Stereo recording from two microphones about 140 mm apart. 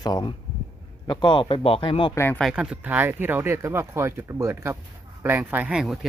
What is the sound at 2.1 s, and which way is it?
Speech, 15° left (ahead or behind).